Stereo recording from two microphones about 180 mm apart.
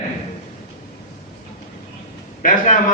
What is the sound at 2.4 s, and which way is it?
Speech, 50° left (ahead or behind).